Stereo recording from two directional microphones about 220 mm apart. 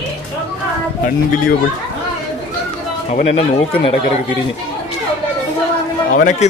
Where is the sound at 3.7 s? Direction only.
25° left (ahead or behind).